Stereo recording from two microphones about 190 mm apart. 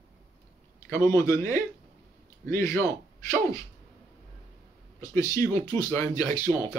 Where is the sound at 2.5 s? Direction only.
15° left (ahead or behind).